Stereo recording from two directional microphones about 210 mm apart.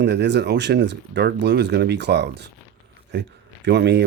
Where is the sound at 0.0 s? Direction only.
55° right (ahead or behind).